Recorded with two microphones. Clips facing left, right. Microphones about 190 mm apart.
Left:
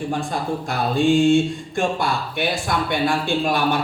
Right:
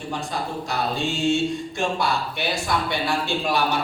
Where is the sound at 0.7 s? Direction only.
55° left (ahead or behind).